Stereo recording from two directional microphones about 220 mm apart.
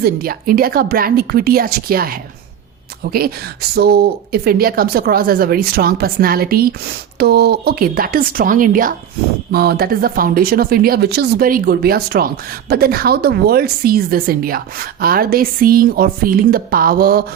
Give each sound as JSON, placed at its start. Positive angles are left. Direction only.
{"t": 0.0, "sound": "speech", "side_deg": -40}